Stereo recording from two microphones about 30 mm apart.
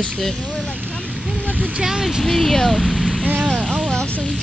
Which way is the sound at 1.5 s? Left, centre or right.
Right.